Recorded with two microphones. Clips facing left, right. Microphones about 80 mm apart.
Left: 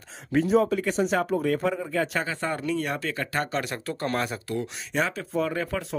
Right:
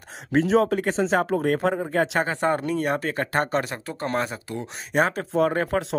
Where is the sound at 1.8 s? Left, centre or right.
Right.